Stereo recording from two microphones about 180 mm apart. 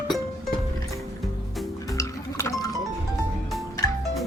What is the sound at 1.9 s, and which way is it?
Horse, 15° left (ahead or behind).